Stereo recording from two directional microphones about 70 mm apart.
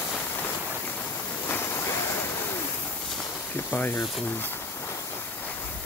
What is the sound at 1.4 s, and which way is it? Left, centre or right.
Waves, left.